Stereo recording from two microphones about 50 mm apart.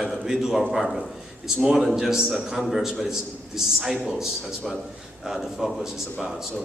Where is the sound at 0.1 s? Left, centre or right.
Centre.